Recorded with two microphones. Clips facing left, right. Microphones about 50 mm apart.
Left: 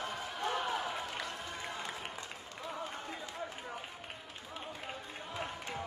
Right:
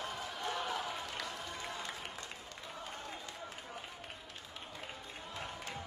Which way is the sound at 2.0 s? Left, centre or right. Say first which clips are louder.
Left 2 dB; centre.